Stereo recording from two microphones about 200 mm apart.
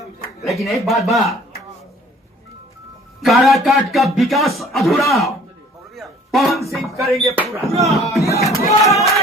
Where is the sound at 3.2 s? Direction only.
Centre (ahead or behind).